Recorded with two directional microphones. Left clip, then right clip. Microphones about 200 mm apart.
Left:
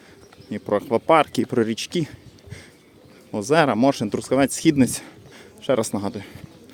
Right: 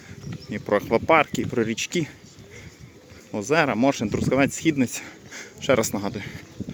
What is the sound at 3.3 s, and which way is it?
Speech, 15° left (ahead or behind).